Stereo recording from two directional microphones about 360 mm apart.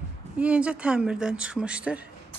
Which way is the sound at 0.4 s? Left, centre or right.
Centre.